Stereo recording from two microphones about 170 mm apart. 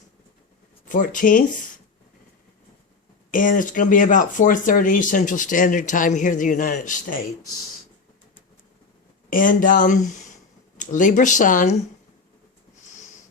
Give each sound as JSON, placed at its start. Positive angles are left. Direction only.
{"t": 0.9, "sound": "speech", "side_deg": 50}
{"t": 3.3, "sound": "speech", "side_deg": 50}
{"t": 9.3, "sound": "speech", "side_deg": 55}